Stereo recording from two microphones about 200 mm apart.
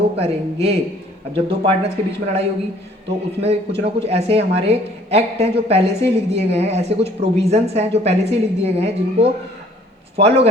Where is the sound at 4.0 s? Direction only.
30° right (ahead or behind).